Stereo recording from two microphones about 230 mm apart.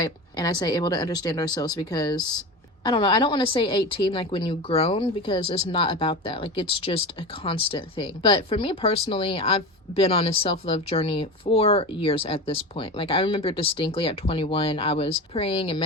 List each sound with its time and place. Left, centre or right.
0.0 s a woman's voice: centre